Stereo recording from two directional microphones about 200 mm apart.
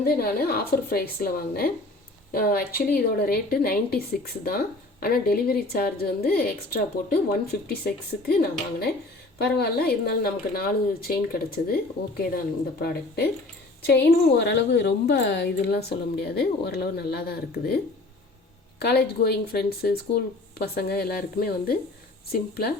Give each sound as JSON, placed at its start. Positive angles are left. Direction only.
{"t": 0.0, "sound": "a woman's voice", "side_deg": 50}
{"t": 13.8, "sound": "a woman's voice", "side_deg": 55}
{"t": 18.8, "sound": "a woman's voice", "side_deg": 50}